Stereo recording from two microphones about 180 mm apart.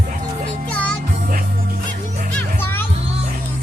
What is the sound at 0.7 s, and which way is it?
Music, 5° left (ahead or behind).